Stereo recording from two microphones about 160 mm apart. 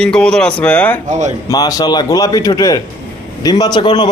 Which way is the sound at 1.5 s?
20° left (ahead or behind).